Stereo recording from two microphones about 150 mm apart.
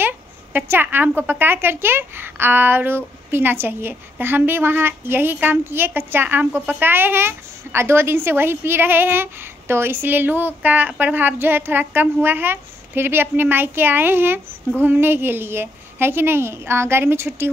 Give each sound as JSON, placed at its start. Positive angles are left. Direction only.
{"t": 0.0, "sound": "a woman's voice", "side_deg": -15}